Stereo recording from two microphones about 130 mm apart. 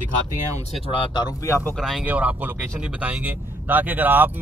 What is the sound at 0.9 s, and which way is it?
Speech, 40° left (ahead or behind).